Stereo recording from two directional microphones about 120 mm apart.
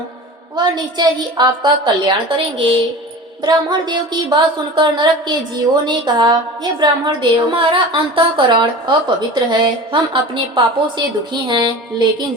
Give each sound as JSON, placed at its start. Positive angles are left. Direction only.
{"t": 0.5, "sound": "a woman's voice", "side_deg": -40}